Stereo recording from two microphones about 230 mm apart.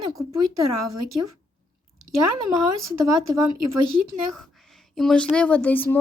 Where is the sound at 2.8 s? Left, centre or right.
Right.